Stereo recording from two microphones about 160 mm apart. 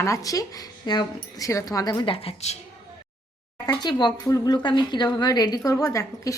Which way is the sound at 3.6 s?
25° left (ahead or behind).